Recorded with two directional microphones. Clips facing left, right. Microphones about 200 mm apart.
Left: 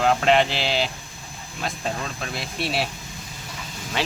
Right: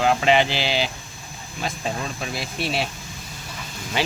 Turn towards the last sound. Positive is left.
turn(degrees=-5)  # may be behind; listen again after turning